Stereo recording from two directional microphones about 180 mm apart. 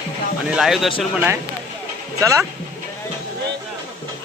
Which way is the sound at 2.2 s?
15° right (ahead or behind).